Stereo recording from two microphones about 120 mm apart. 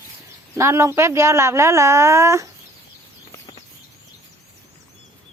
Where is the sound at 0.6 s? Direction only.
25° right (ahead or behind).